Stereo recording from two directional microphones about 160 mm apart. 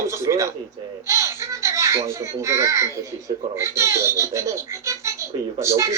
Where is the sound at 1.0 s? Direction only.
20° right (ahead or behind).